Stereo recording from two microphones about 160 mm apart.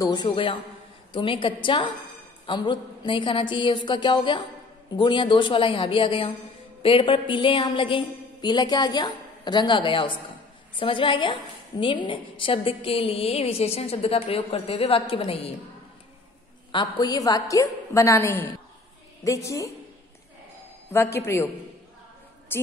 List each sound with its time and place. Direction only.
0.0 s a woman's voice: 25° left (ahead or behind)
17.0 s a woman's voice: 25° left (ahead or behind)
20.9 s a man's voice: 15° left (ahead or behind)
22.5 s music: 15° left (ahead or behind)